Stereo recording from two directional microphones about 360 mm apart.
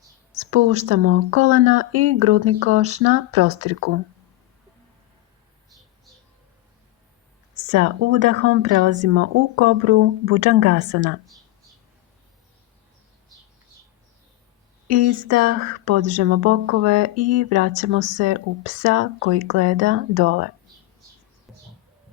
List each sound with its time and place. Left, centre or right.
0.5 s speech: right
7.7 s speech: right
14.8 s speech: right